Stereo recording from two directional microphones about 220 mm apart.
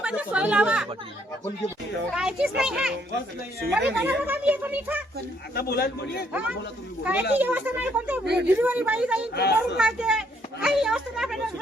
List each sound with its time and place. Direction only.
0.0 s a woman's voice: 5° right (ahead or behind)
2.1 s a woman's voice: 5° right (ahead or behind)
5.5 s a man's voice: 45° left (ahead or behind)
7.0 s speech: 5° right (ahead or behind)
8.2 s speech: 50° right (ahead or behind)
8.4 s speech: 10° right (ahead or behind)
9.3 s a man's voice: 50° left (ahead or behind)
9.6 s a woman's voice: 5° right (ahead or behind)